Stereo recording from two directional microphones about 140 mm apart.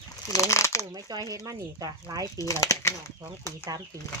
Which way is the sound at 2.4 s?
25° left (ahead or behind).